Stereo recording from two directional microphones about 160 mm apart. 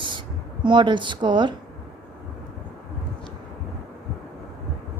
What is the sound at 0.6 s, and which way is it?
Speech, 30° right (ahead or behind).